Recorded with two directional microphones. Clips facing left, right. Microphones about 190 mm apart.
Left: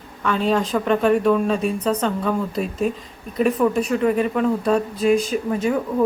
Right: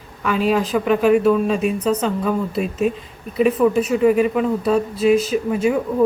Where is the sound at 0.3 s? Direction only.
5° right (ahead or behind).